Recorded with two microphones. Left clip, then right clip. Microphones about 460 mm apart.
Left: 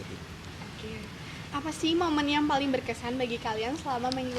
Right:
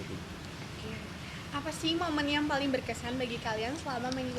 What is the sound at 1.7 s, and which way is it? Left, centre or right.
A woman's voice, left.